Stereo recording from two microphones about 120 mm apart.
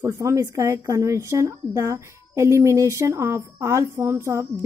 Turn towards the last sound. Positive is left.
turn(degrees=-25)  # may be behind; listen again after turning